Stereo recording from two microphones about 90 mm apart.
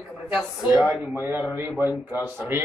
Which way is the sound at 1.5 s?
20° right (ahead or behind).